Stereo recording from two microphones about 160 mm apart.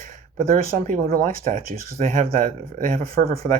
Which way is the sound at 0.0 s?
60° right (ahead or behind).